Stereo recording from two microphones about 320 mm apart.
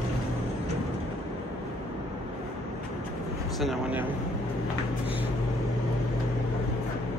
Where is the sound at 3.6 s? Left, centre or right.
Centre.